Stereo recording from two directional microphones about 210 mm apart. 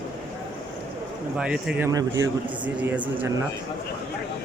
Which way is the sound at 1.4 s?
5° right (ahead or behind).